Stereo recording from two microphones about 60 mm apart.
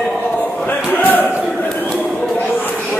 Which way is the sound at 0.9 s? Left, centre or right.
Left.